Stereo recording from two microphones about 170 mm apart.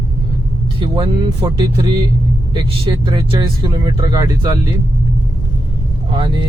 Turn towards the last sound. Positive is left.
turn(degrees=-30)  # may be behind; listen again after turning